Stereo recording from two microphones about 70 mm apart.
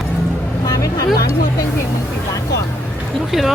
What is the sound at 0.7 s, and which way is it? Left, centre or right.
Vehicle, left.